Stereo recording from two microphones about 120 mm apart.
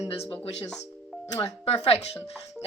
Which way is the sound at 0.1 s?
55° left (ahead or behind).